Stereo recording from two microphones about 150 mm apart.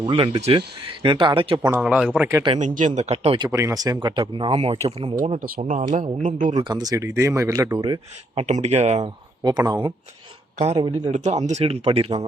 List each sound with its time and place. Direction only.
0.0 s speech: 40° right (ahead or behind)
1.8 s a man's voice: 5° right (ahead or behind)
2.6 s speech: 55° right (ahead or behind)
3.3 s speech: 25° right (ahead or behind); by 5.1 s 40° right (ahead or behind)
5.4 s speech: 65° right (ahead or behind)
6.6 s speech: 30° right (ahead or behind)
8.4 s speech: 50° right (ahead or behind)
9.0 s speech: 30° right (ahead or behind)
11.1 s speech: 50° right (ahead or behind)